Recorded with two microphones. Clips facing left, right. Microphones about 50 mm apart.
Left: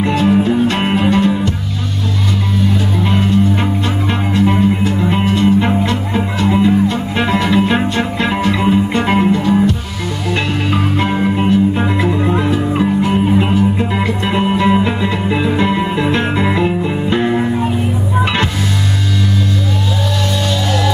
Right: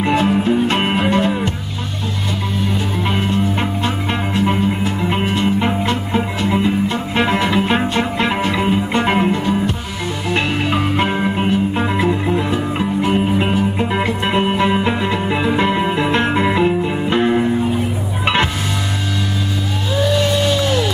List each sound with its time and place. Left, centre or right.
0.0 s music: centre
3.8 s music: right
5.9 s music: centre
9.2 s music: right
12.4 s music: centre
13.1 s music: right
16.1 s music: right
16.4 s music: centre